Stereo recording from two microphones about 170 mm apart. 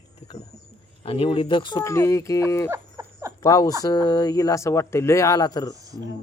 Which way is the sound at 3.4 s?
20° left (ahead or behind).